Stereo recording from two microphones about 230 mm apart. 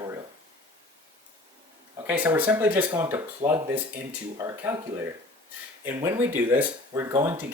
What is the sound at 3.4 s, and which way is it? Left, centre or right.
Speech, right.